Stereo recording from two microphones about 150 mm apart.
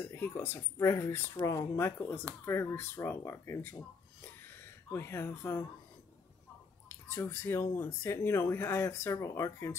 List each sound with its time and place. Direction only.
0.0 s speech: 15° left (ahead or behind)
4.9 s speech: 15° left (ahead or behind)
7.1 s speech: 15° left (ahead or behind)